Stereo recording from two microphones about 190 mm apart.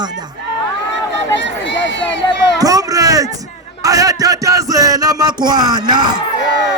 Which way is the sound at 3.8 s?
20° right (ahead or behind).